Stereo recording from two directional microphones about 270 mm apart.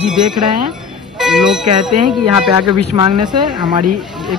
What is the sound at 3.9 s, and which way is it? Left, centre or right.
Speech, centre.